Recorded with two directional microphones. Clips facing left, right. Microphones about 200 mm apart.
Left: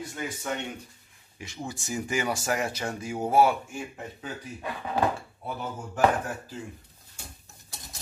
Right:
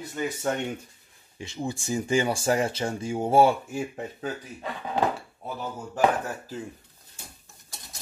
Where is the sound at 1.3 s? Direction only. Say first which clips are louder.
Right 5 dB; 25° right (ahead or behind).